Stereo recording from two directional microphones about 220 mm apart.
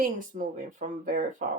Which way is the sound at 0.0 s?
40° right (ahead or behind).